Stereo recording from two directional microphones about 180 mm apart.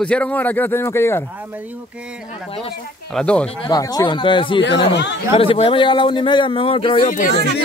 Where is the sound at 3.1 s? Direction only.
5° left (ahead or behind).